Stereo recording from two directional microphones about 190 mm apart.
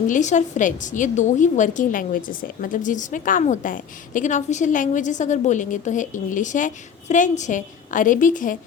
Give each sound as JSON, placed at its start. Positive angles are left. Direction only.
{"t": 0.1, "sound": "a woman's voice", "side_deg": 40}